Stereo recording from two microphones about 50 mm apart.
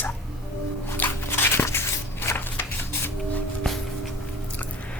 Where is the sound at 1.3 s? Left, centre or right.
Left.